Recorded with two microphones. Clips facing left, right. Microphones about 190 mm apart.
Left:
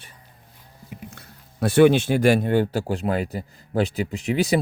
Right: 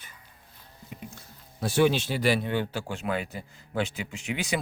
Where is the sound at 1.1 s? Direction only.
60° left (ahead or behind); by 4.6 s 35° left (ahead or behind).